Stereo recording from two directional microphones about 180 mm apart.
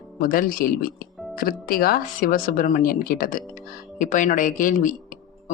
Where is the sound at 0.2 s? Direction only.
50° left (ahead or behind).